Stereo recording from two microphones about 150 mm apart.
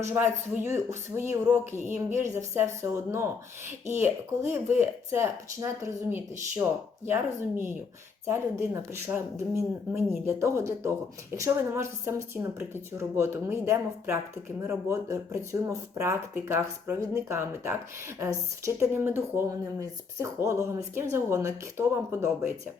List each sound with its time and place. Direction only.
0.0 s speech: 15° right (ahead or behind)